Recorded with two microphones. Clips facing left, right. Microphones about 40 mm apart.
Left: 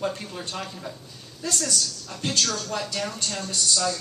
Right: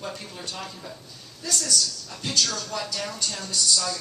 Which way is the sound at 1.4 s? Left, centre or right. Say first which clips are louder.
Even; left.